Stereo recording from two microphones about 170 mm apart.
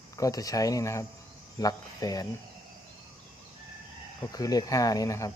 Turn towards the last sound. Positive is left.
turn(degrees=20)  # may be behind; listen again after turning